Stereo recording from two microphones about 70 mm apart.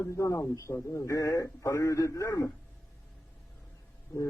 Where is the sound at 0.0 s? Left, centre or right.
Left.